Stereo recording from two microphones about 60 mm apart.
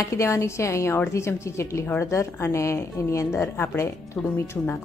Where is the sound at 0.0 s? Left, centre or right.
Left.